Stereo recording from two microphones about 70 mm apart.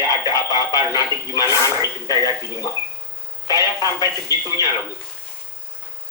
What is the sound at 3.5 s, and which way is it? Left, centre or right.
Speech, left.